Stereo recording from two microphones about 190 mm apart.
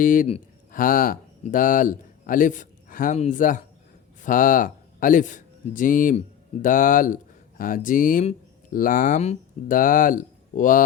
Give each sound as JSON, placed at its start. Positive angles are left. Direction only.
{"t": 0.0, "sound": "a man's voice", "side_deg": 45}